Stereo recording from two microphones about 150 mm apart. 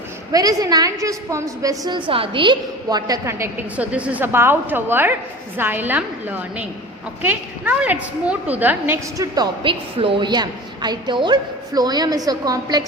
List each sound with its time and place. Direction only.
0.3 s a woman's voice: 25° right (ahead or behind)
9.1 s a woman's voice: 25° right (ahead or behind)